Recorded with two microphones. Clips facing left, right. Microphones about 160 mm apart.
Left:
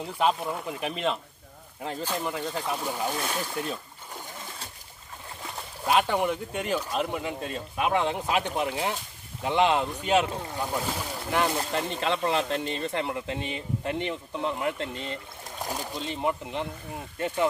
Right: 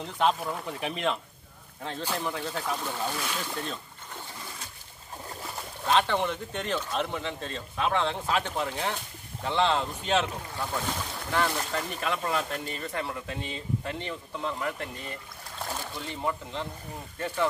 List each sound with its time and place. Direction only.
0.0 s speech: 5° left (ahead or behind)
5.9 s speech: 10° left (ahead or behind)